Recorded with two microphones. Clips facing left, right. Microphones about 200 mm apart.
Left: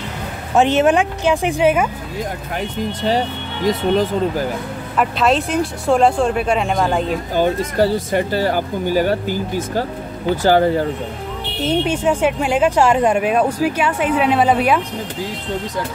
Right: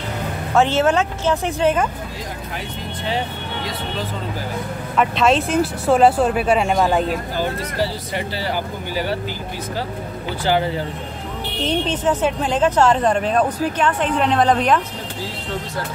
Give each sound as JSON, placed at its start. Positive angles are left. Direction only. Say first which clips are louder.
{"t": 0.6, "sound": "speech", "louder": "left 3 dB", "side_deg": 15}
{"t": 3.0, "sound": "speech", "louder": "left 4 dB", "side_deg": 40}
{"t": 4.9, "sound": "speech", "louder": "even", "side_deg": 0}
{"t": 7.3, "sound": "speech", "louder": "left 10 dB", "side_deg": 50}
{"t": 11.5, "sound": "speech", "louder": "left 3 dB", "side_deg": 10}